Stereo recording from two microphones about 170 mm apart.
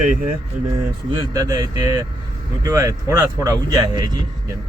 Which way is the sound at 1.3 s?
20° right (ahead or behind).